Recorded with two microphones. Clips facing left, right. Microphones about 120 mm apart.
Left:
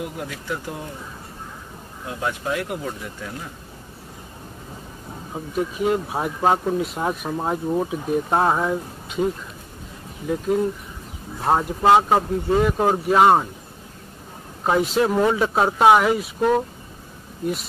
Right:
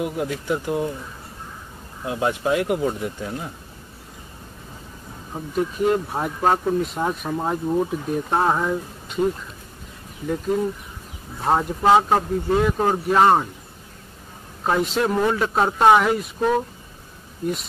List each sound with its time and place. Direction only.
0.0 s speech: 25° right (ahead or behind)
2.0 s speech: 25° right (ahead or behind)
5.3 s speech: 10° left (ahead or behind)
11.4 s speech: 5° left (ahead or behind)
14.6 s speech: 5° left (ahead or behind)